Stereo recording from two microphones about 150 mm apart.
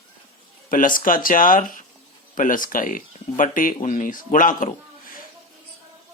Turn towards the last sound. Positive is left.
turn(degrees=65)  # may be behind; listen again after turning